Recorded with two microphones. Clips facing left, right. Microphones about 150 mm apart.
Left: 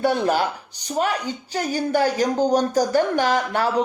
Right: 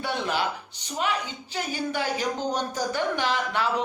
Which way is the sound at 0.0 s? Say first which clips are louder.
Left 8 dB; 45° left (ahead or behind).